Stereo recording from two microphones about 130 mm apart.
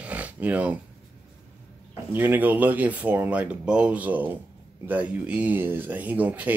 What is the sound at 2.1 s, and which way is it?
Speech, 15° right (ahead or behind).